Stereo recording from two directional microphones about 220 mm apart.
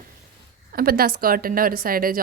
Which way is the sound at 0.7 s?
45° right (ahead or behind).